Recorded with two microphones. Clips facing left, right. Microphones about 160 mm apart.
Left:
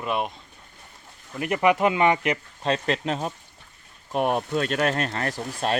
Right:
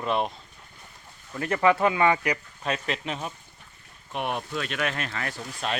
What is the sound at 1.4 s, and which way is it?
Speech, 15° left (ahead or behind).